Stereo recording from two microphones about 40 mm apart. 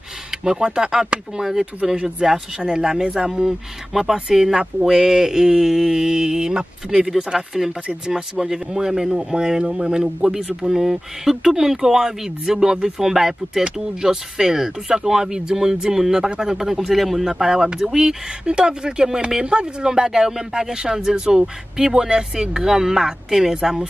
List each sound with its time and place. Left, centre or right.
0.3 s a sound: centre
0.7 s speech: centre
17.3 s speech: centre